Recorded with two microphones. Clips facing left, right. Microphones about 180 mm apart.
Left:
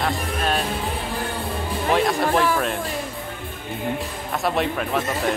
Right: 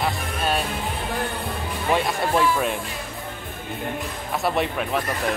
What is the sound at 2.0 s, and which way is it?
Speech, centre (ahead or behind).